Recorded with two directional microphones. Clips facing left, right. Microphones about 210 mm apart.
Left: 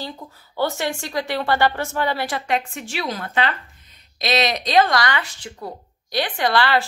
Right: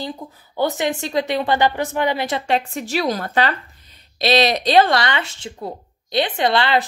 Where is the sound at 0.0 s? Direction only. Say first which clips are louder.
Right 4 dB; 15° right (ahead or behind).